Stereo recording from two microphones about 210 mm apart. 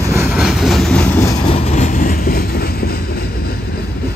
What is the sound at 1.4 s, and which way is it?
Train, 25° left (ahead or behind).